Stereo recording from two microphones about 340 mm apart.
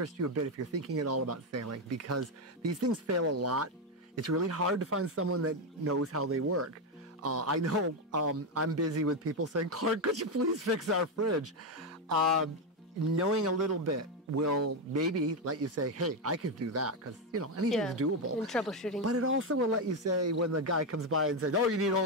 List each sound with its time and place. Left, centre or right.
0.0 s speech: right
13.0 s speech: right
17.6 s speech: centre
17.9 s speech: right
18.5 s speech: centre
19.0 s speech: right